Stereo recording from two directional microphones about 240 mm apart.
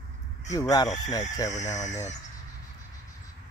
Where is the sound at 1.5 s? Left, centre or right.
Left.